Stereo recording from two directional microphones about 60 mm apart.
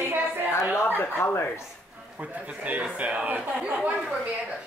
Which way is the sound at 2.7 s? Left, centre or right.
Right.